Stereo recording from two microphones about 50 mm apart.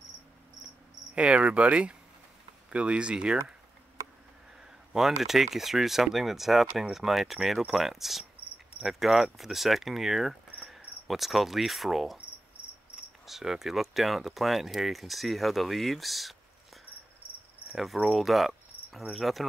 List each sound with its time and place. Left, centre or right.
1.1 s speech: right
4.9 s speech: centre
10.6 s cricket: centre
13.2 s speech: centre
18.0 s cricket: centre
19.1 s speech: centre